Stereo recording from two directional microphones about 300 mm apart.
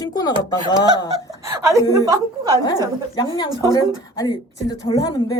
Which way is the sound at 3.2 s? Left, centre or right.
Centre.